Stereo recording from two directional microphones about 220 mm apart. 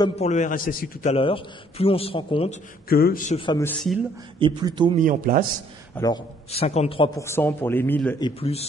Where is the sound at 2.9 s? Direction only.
40° left (ahead or behind).